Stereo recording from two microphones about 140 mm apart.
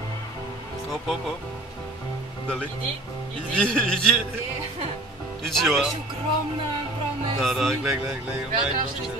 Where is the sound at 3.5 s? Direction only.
5° left (ahead or behind).